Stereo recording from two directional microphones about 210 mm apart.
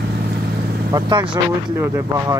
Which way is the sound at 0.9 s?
20° right (ahead or behind).